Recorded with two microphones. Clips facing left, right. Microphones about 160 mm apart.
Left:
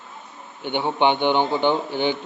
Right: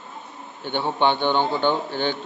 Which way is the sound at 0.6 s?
15° left (ahead or behind).